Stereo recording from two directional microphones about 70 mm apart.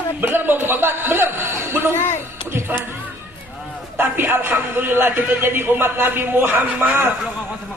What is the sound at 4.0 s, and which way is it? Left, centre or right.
A man's voice, right.